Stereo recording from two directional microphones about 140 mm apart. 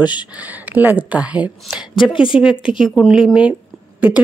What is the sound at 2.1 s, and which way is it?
Speech, 35° left (ahead or behind).